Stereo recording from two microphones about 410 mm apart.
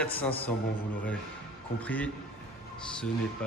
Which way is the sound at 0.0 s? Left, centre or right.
Centre.